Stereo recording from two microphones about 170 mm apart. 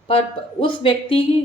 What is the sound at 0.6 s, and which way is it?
Speech, 30° left (ahead or behind).